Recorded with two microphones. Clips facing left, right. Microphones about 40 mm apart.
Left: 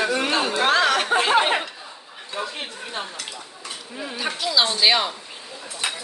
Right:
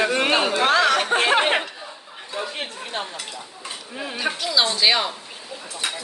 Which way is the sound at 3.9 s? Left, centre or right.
Right.